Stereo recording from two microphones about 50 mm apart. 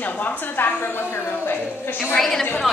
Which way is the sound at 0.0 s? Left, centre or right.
Left.